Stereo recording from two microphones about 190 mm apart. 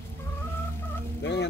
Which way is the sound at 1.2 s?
65° left (ahead or behind).